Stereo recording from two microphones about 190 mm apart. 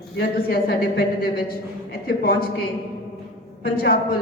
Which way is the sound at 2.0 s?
55° left (ahead or behind).